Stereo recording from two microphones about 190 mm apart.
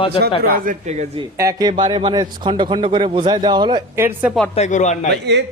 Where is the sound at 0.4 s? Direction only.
45° right (ahead or behind).